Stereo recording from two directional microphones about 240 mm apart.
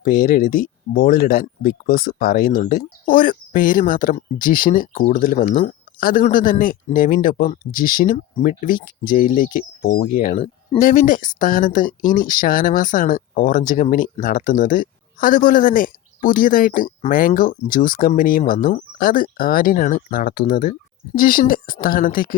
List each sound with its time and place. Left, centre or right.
0.0 s speech: left